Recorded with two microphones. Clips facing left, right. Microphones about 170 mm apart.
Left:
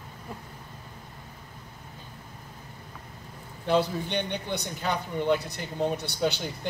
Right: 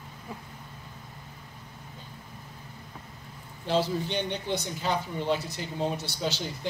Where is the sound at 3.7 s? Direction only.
60° left (ahead or behind).